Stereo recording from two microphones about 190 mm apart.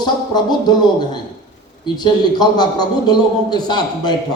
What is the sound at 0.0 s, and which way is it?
A man's voice, 20° left (ahead or behind).